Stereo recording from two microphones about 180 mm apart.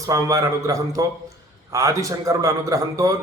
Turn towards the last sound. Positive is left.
turn(degrees=-15)  # may be behind; listen again after turning